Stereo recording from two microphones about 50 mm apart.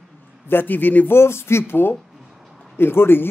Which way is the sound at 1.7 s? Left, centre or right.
Left.